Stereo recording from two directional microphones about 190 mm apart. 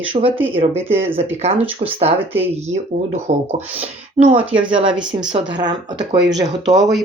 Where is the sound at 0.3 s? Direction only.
10° right (ahead or behind).